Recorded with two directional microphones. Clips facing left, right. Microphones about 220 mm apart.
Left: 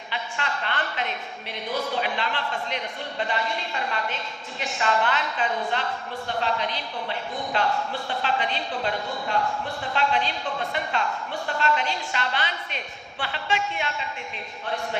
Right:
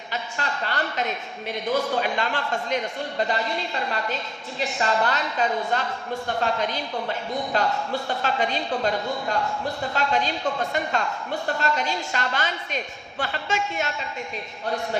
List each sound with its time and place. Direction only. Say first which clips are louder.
0.1 s a sound: right 1 dB; 40° right (ahead or behind)
2.1 s a woman's voice: right 3 dB; 45° right (ahead or behind)
4.6 s a woman's voice: right 1 dB; 35° right (ahead or behind)
9.9 s a woman's voice: left 1 dB; 45° right (ahead or behind)